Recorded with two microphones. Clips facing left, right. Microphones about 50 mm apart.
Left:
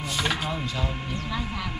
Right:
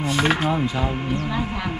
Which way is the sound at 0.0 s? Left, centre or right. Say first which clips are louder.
Right 7 dB; right.